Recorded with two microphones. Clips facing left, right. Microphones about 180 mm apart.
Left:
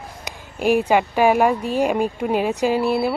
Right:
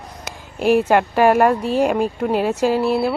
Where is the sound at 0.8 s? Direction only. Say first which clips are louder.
Right 2 dB; centre (ahead or behind).